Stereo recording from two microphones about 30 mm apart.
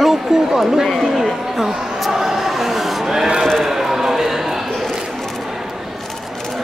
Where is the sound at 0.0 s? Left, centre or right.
Centre.